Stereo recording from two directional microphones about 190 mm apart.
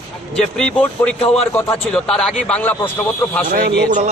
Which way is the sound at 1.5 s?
5° left (ahead or behind).